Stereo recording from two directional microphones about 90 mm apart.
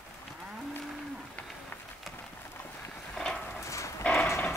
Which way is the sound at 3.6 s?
35° left (ahead or behind).